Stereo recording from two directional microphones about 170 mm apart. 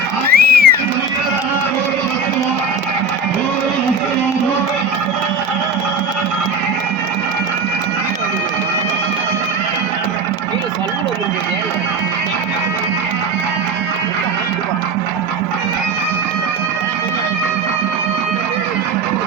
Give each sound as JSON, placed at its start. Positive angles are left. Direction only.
{"t": 0.3, "sound": "music", "side_deg": -65}